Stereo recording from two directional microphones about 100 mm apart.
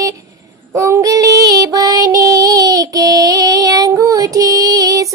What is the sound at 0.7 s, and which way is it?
Child singing, 30° right (ahead or behind).